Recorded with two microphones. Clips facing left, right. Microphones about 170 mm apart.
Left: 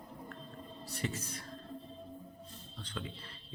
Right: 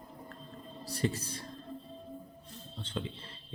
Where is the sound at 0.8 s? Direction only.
35° right (ahead or behind).